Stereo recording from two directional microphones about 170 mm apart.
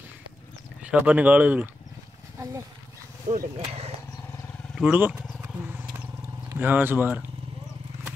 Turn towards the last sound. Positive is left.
turn(degrees=-10)  # may be behind; listen again after turning